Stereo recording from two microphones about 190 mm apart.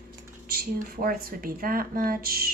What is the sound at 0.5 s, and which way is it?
Speech, 50° right (ahead or behind).